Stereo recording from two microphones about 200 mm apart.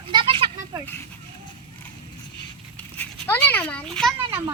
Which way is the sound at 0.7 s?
15° right (ahead or behind).